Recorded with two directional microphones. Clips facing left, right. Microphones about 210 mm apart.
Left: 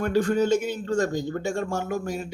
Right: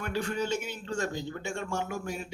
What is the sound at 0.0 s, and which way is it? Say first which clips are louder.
A man's voice: left 10 dB; 40° left (ahead or behind).